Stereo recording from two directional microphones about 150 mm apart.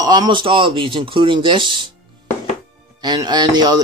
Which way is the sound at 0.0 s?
25° right (ahead or behind).